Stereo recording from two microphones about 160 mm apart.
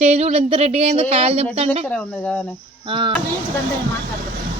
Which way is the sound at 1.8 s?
5° left (ahead or behind).